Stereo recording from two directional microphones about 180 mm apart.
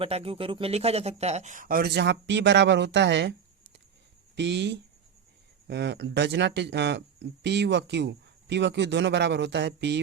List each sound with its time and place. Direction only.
0.0 s speech: 35° right (ahead or behind); by 3.3 s 75° right (ahead or behind)
4.4 s speech: 75° right (ahead or behind)